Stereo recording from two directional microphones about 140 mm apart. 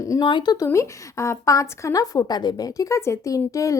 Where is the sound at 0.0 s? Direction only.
25° left (ahead or behind).